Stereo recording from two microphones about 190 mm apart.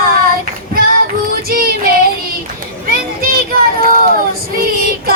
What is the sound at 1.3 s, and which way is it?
Child singing, 50° right (ahead or behind).